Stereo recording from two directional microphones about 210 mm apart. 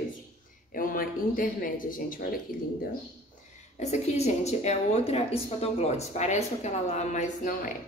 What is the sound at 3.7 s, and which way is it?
A woman's voice, 30° left (ahead or behind).